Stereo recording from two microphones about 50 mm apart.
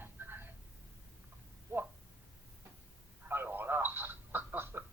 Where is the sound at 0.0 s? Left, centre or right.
Right.